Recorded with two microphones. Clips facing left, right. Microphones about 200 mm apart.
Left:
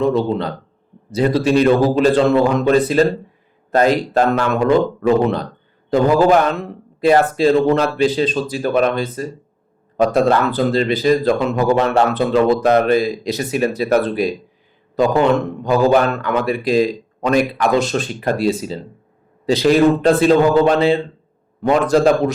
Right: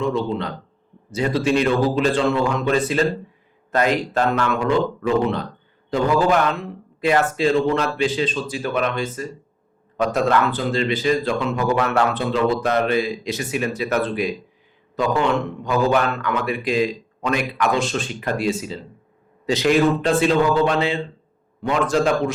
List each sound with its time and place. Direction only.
0.0 s a man's voice: 35° left (ahead or behind)
12.1 s a man's voice: 40° left (ahead or behind)